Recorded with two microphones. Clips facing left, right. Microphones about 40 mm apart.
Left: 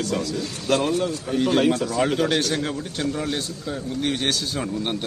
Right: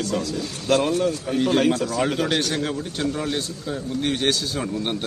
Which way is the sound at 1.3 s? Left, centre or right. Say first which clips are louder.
Left 1 dB; centre.